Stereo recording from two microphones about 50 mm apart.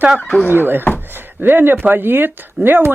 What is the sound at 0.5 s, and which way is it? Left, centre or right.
Speech, right.